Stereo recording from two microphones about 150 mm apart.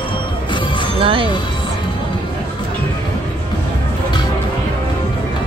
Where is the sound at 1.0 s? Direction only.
35° right (ahead or behind).